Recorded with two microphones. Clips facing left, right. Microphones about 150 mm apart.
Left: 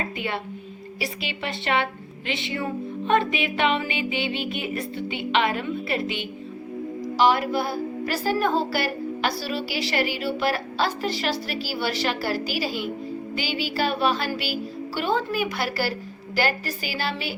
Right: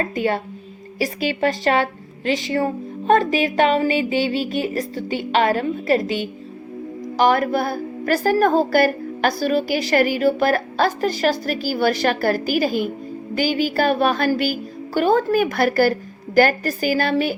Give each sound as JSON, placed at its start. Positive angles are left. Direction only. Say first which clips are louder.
{"t": 0.0, "sound": "a woman's voice", "louder": "right 8 dB", "side_deg": -40}